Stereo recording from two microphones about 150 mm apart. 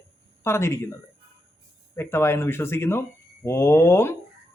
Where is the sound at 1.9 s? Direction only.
15° left (ahead or behind).